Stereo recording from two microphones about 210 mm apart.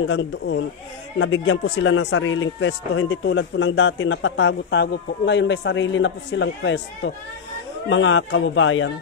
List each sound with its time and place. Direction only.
0.1 s speech: 60° left (ahead or behind)